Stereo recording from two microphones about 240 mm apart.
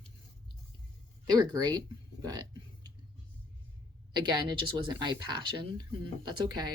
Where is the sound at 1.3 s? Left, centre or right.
Centre.